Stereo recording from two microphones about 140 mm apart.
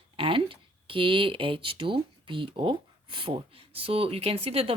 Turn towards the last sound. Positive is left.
turn(degrees=-45)  # may be behind; listen again after turning